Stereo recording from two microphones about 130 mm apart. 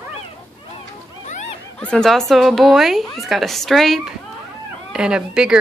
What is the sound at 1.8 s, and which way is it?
Speech, 5° left (ahead or behind).